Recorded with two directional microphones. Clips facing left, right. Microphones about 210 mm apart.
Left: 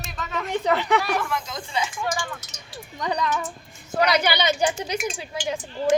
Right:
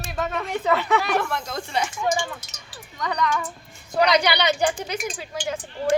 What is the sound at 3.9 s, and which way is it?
Speech, 5° left (ahead or behind).